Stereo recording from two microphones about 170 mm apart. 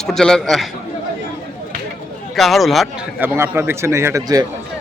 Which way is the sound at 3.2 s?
15° right (ahead or behind).